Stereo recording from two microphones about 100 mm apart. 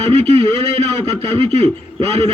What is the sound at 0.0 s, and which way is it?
A man's voice, 90° right.